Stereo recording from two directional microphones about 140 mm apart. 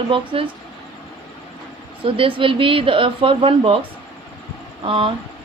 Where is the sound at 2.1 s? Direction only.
40° right (ahead or behind).